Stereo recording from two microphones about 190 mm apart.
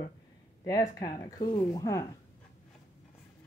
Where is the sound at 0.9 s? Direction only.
20° left (ahead or behind).